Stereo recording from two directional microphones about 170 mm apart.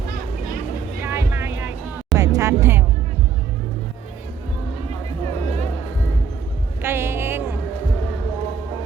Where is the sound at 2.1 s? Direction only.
20° right (ahead or behind).